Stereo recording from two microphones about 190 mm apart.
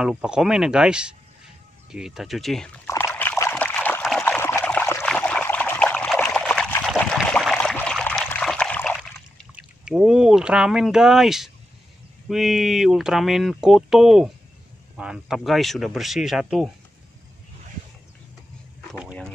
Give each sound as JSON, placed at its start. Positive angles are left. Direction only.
{"t": 0.0, "sound": "speech", "side_deg": -5}
{"t": 3.2, "sound": "trickle", "side_deg": 10}
{"t": 12.3, "sound": "speech", "side_deg": 0}
{"t": 18.9, "sound": "a sound", "side_deg": -5}